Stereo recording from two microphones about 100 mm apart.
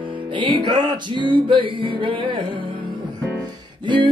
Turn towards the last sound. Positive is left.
turn(degrees=-50)  # may be behind; listen again after turning